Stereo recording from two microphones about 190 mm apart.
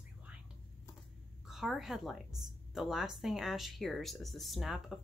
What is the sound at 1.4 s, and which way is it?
A woman's voice, centre (ahead or behind).